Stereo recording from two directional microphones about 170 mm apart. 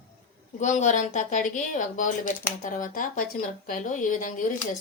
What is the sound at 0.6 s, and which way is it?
Speech, 45° left (ahead or behind).